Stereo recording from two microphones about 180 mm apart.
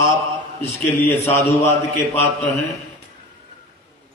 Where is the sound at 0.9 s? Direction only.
10° left (ahead or behind).